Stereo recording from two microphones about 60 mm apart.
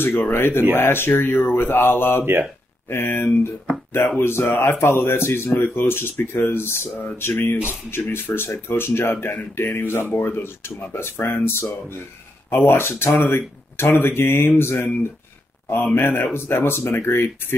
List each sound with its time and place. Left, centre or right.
0.0 s speech: left